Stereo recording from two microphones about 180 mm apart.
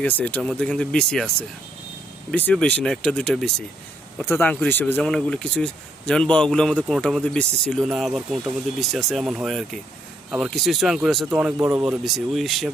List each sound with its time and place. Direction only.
0.0 s speech: 10° left (ahead or behind); by 11.8 s 15° right (ahead or behind)
11.8 s speech: centre (ahead or behind)